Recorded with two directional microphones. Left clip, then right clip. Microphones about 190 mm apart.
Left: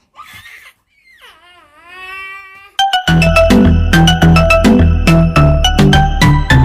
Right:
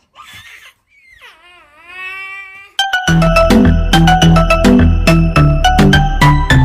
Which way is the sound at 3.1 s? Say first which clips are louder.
Right 1 dB; centre (ahead or behind).